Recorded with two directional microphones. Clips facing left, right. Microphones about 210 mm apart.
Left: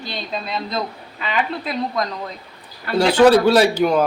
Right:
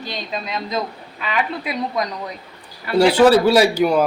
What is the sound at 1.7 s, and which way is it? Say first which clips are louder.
Speech: even; 10° right (ahead or behind).